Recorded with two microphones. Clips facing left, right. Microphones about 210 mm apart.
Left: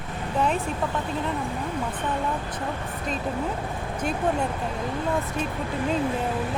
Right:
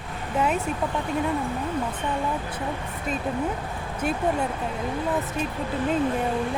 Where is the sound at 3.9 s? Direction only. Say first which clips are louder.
Right 1 dB; 5° right (ahead or behind).